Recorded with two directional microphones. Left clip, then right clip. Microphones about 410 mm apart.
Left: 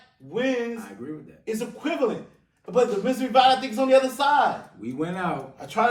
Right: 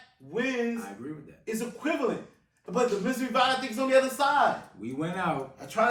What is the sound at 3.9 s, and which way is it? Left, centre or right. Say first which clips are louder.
A man's voice: left 4 dB; centre.